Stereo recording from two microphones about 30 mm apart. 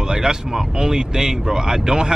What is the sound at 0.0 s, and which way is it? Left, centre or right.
Speech, right.